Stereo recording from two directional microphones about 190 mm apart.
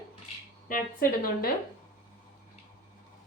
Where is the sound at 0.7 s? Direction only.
50° left (ahead or behind).